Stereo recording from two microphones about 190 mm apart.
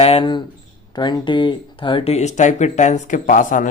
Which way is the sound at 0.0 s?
30° left (ahead or behind).